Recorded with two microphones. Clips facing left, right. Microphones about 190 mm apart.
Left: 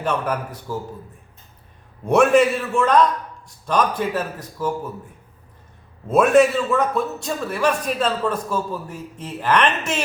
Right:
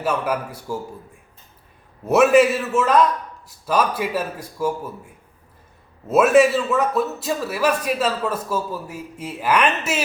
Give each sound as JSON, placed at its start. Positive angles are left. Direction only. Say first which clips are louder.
{"t": 0.0, "sound": "a man's voice", "louder": "right 1 dB", "side_deg": -10}
{"t": 2.0, "sound": "a man's voice", "louder": "right 1 dB", "side_deg": -5}
{"t": 6.1, "sound": "a man's voice", "louder": "even", "side_deg": -5}